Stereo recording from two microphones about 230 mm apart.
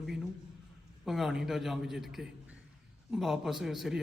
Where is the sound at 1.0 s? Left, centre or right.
Centre.